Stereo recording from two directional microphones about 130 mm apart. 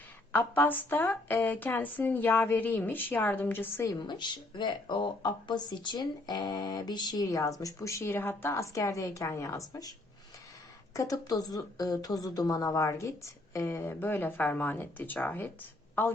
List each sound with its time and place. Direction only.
0.3 s speech: 15° left (ahead or behind)
3.8 s speech: 35° left (ahead or behind)
10.9 s speech: 25° left (ahead or behind)